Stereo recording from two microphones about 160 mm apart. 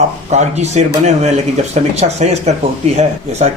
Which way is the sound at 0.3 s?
45° right (ahead or behind).